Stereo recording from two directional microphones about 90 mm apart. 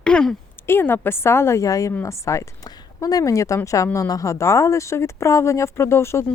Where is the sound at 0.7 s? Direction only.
25° left (ahead or behind).